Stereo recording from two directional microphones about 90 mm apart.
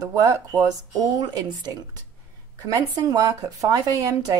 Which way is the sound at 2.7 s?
40° right (ahead or behind).